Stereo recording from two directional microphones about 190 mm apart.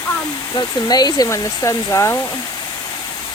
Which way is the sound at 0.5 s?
20° left (ahead or behind).